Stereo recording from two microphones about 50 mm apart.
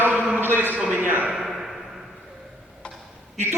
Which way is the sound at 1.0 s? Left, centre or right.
Right.